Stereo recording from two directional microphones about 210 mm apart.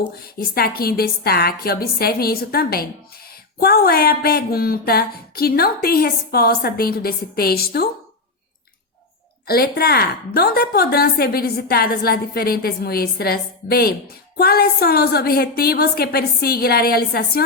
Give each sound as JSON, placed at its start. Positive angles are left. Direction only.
{"t": 0.0, "sound": "speech", "side_deg": 45}
{"t": 9.5, "sound": "speech", "side_deg": 45}